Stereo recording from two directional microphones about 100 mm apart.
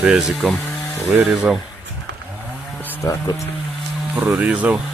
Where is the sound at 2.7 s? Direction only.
20° left (ahead or behind).